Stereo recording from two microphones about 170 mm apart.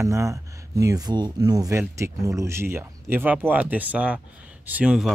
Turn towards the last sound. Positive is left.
turn(degrees=-5)  # may be behind; listen again after turning